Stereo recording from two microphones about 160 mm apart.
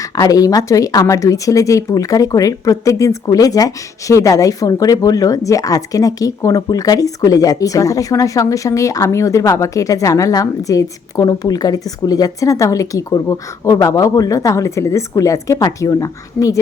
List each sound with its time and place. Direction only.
0.0 s a woman's voice: 20° left (ahead or behind)